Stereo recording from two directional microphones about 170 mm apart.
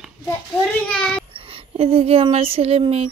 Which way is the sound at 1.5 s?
35° right (ahead or behind).